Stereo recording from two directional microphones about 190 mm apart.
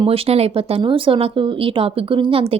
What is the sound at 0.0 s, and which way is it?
Speech, 30° right (ahead or behind).